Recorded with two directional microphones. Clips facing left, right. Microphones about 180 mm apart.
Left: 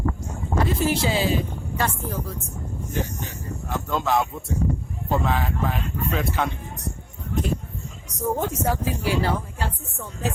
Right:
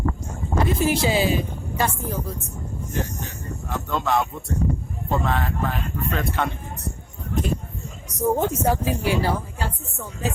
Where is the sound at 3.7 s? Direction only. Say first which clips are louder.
Even; centre (ahead or behind).